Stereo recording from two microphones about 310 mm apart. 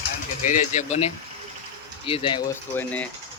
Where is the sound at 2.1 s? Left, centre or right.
Centre.